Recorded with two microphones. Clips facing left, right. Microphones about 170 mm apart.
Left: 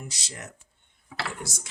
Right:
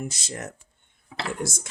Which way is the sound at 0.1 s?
50° right (ahead or behind).